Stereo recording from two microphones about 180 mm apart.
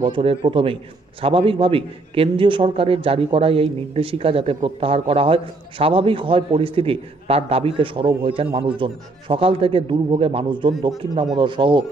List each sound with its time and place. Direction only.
0.0 s a man's voice: 30° right (ahead or behind)